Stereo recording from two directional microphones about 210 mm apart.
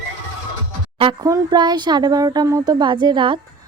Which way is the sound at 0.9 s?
25° right (ahead or behind).